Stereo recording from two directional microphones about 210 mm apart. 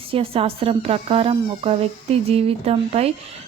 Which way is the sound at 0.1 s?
25° right (ahead or behind).